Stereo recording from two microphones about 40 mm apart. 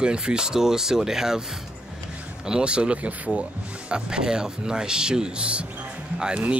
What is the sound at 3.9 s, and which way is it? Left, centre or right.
Speech, centre.